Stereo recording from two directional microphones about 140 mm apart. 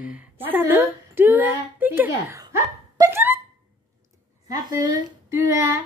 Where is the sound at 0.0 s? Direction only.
10° right (ahead or behind).